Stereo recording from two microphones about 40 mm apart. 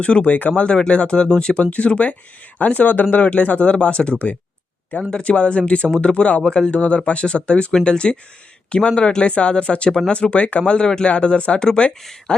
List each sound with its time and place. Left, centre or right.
0.0 s speech: left
10.7 s speech: left
11.6 s speech: centre